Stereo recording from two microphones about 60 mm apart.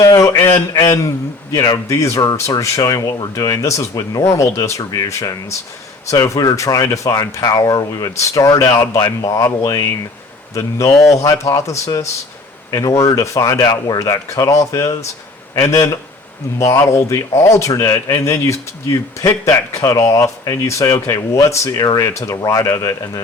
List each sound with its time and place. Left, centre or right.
0.0 s speech: left
0.7 s a man's voice: left
4.4 s speech: left
6.9 s speech: left
8.1 s speech: left
9.2 s speech: left
10.5 s speech: left
10.9 s speech: centre
11.2 s speech: left
16.7 s speech: left
22.0 s speech: left